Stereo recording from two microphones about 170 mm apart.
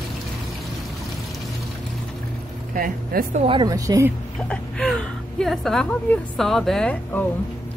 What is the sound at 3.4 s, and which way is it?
Speech, 30° right (ahead or behind).